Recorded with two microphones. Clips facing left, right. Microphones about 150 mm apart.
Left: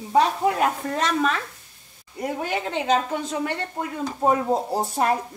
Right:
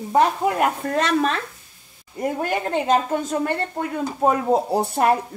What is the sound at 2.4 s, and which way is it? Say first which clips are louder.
A woman's voice: right 2 dB; 45° right (ahead or behind).